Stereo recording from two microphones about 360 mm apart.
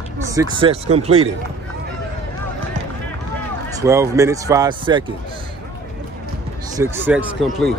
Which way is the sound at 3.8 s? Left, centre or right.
Centre.